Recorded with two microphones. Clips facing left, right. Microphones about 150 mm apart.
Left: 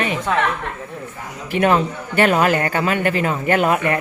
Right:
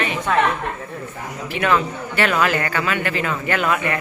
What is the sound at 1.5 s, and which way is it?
A man's voice, 45° left (ahead or behind).